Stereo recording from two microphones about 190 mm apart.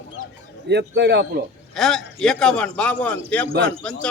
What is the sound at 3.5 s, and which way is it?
Speech, 65° right (ahead or behind).